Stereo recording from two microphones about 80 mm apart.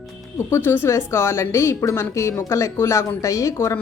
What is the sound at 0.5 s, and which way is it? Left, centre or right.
Speech, left.